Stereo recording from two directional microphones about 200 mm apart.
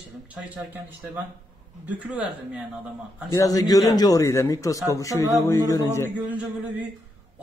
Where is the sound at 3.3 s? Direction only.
15° left (ahead or behind).